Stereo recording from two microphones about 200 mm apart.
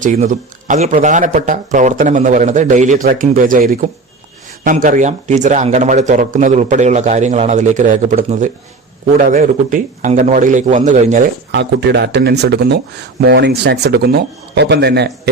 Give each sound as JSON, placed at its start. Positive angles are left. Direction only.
{"t": 0.0, "sound": "speech", "side_deg": -40}
{"t": 11.5, "sound": "speech", "side_deg": -60}